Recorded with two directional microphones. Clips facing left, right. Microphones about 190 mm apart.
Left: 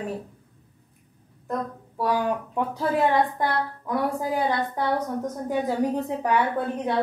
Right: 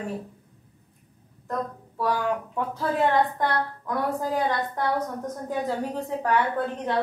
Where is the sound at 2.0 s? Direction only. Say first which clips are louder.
Left 1 dB; 15° left (ahead or behind).